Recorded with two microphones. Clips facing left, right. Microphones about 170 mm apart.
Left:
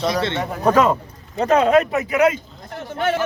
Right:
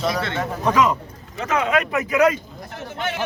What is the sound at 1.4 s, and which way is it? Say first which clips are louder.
Speech: left 6 dB; 35° left (ahead or behind).